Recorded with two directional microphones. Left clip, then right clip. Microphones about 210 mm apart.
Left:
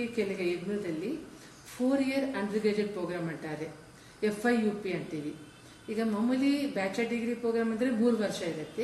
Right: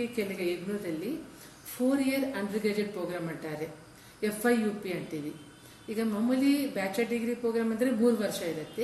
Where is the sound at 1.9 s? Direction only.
5° right (ahead or behind).